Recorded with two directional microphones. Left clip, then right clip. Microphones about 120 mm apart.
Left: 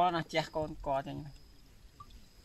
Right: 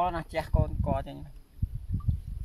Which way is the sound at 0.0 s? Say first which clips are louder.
Right 1 dB; 15° right (ahead or behind).